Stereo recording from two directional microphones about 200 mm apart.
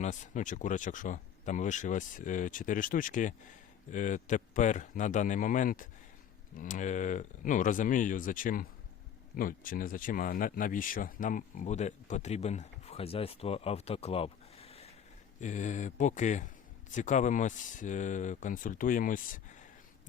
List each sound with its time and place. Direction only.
0.0 s speech: 40° left (ahead or behind)